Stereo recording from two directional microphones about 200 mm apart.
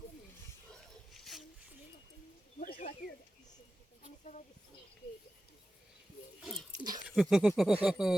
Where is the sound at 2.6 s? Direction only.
45° left (ahead or behind).